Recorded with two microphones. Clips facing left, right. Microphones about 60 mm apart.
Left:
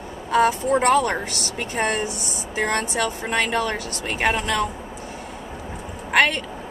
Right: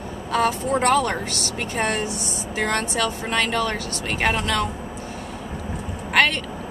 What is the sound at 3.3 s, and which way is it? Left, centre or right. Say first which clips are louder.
Speech: left 1 dB; centre.